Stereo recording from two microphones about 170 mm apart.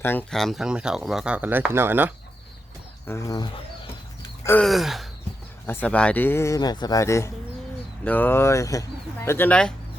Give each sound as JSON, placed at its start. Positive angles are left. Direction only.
{"t": 0.0, "sound": "speech", "side_deg": 10}
{"t": 3.1, "sound": "speech", "side_deg": 20}
{"t": 4.6, "sound": "speech", "side_deg": 0}
{"t": 5.6, "sound": "speech", "side_deg": 10}